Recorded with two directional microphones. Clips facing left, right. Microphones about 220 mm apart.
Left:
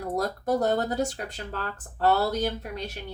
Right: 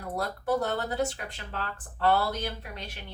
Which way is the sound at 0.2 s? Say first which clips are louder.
Left 2 dB; 40° left (ahead or behind).